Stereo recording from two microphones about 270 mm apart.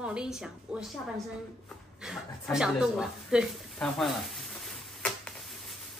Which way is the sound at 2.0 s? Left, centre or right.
Centre.